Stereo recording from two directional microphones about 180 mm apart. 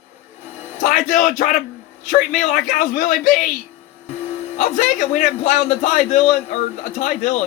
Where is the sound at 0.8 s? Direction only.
45° left (ahead or behind).